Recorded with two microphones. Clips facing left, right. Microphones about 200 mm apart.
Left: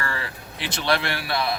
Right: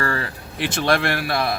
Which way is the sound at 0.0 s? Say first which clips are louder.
Right 6 dB; 45° right (ahead or behind).